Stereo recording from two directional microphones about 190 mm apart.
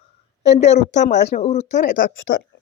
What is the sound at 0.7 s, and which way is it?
Speech, 35° left (ahead or behind).